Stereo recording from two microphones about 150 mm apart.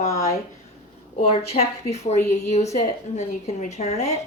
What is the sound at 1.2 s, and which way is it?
Speech, 45° left (ahead or behind).